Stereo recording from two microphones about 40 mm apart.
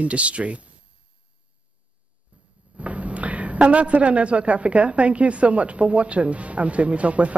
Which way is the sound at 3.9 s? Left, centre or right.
Right.